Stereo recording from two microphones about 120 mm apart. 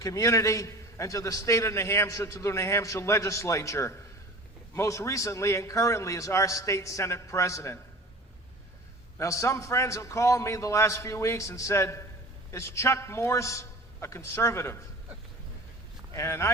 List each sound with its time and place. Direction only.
0.0 s a man's voice: 25° left (ahead or behind)
9.1 s a man's voice: 25° left (ahead or behind)
16.1 s a man's voice: 25° left (ahead or behind)